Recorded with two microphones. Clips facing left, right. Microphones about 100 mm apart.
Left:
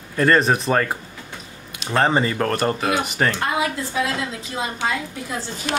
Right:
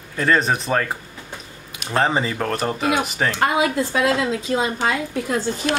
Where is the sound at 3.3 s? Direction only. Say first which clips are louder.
Right 4 dB; 65° right (ahead or behind).